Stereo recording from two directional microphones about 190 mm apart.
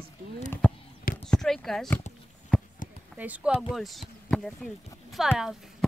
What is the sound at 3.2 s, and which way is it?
Speech, 10° right (ahead or behind).